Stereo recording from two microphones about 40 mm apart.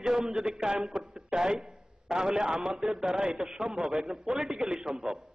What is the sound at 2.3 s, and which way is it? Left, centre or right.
A man's voice, centre.